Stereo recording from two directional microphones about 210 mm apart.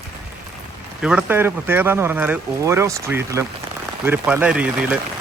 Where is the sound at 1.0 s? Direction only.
5° right (ahead or behind).